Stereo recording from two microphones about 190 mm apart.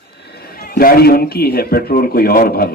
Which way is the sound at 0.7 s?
50° left (ahead or behind).